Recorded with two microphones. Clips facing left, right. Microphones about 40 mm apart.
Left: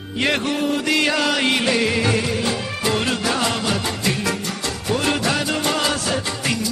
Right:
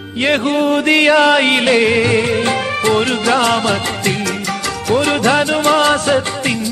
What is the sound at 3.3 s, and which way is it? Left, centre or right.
Music, right.